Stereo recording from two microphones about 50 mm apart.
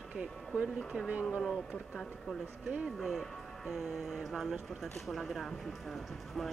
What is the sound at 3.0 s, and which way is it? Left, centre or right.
Speech, centre.